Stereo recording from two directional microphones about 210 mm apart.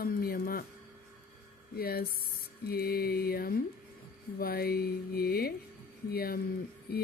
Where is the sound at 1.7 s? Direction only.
45° left (ahead or behind).